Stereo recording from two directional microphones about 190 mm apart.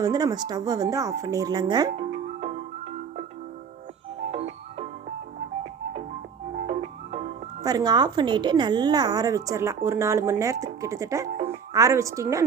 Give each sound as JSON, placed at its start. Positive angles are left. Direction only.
{"t": 0.0, "sound": "speech", "side_deg": -20}
{"t": 4.2, "sound": "music", "side_deg": -30}
{"t": 6.7, "sound": "music", "side_deg": -35}
{"t": 7.6, "sound": "a woman's voice", "side_deg": -20}